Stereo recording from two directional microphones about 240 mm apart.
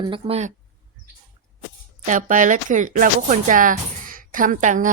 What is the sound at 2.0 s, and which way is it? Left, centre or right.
Speech, right.